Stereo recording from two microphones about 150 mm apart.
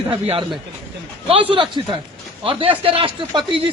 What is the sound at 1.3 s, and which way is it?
Speech, 35° right (ahead or behind).